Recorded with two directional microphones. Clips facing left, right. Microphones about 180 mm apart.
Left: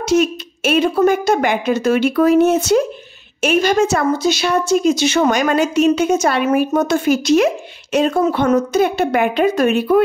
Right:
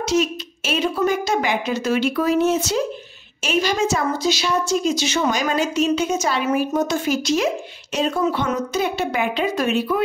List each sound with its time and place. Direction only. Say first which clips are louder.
0.0 s a woman's voice: left 5 dB; 55° left (ahead or behind)